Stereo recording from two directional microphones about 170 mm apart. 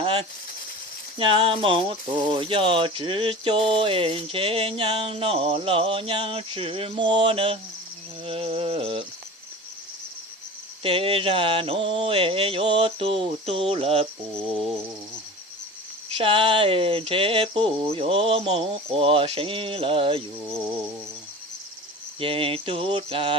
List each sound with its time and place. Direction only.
0.0 s snake: 35° right (ahead or behind)
1.2 s cricket: 30° right (ahead or behind)
10.8 s cricket: 35° right (ahead or behind)
16.1 s cricket: 30° right (ahead or behind)
22.2 s cricket: 30° right (ahead or behind)